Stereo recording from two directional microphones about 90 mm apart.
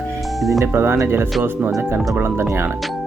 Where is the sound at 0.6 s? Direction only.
25° right (ahead or behind).